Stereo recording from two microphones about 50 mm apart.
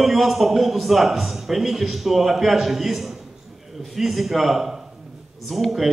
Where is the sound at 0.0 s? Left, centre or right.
Centre.